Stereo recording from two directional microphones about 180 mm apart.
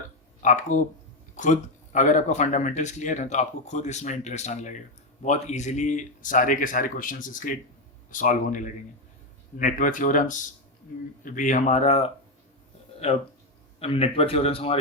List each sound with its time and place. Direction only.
0.4 s speech: 45° left (ahead or behind)
13.7 s speech: 30° left (ahead or behind)